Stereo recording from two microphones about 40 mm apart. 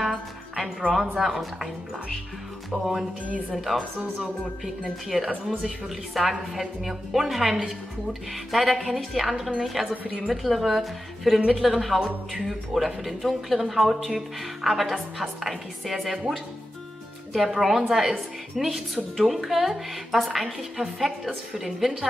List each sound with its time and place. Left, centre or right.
0.0 s music: centre
1.1 s a woman's voice: centre
2.8 s a woman's voice: centre
5.1 s speech: centre
6.1 s a woman's voice: centre